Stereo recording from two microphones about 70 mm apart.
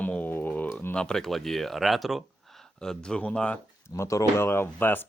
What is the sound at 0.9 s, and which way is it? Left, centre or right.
Speech, centre.